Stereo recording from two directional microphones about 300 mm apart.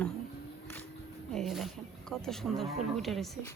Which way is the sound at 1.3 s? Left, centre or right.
Centre.